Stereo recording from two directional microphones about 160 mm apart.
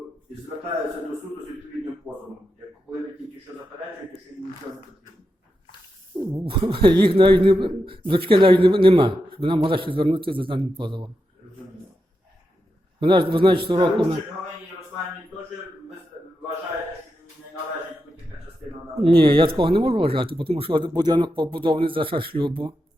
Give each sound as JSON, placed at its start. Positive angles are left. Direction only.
{"t": 6.1, "sound": "speech", "side_deg": -30}
{"t": 13.0, "sound": "speech", "side_deg": -30}
{"t": 18.9, "sound": "speech", "side_deg": -35}